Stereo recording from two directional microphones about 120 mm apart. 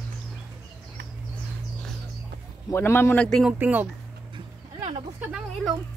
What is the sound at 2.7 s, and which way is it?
Speech, 20° left (ahead or behind).